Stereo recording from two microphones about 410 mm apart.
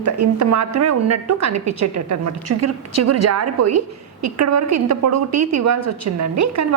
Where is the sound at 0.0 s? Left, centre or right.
Right.